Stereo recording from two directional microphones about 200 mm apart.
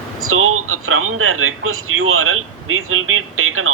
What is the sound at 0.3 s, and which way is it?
Speech, 90° right.